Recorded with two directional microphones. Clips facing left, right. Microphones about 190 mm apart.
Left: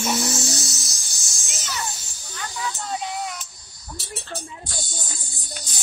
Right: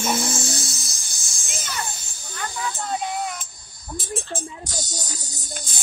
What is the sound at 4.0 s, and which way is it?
Music, 50° right (ahead or behind).